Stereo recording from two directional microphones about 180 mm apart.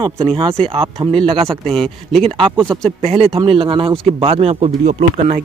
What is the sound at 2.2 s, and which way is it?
A man's voice, 30° right (ahead or behind).